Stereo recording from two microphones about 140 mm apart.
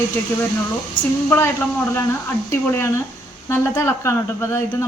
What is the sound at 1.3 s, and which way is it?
Speech, 15° left (ahead or behind).